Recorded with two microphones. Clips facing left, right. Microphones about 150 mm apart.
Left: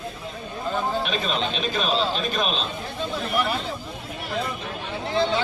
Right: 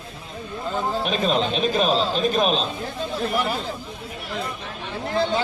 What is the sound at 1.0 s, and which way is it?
Speech, 40° right (ahead or behind).